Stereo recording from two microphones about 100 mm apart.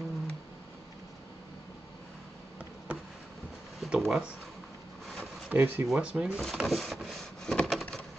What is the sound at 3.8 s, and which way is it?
Speech, 5° right (ahead or behind).